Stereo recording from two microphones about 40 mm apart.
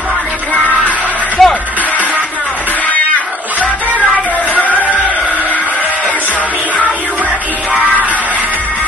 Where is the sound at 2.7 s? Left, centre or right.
Left.